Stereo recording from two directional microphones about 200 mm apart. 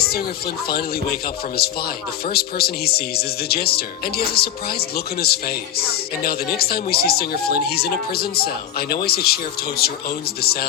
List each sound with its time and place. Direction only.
0.7 s speech: 50° left (ahead or behind)